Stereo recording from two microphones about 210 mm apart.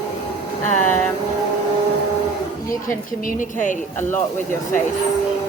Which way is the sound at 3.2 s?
40° left (ahead or behind).